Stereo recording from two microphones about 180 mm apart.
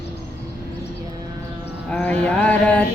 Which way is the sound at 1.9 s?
5° left (ahead or behind).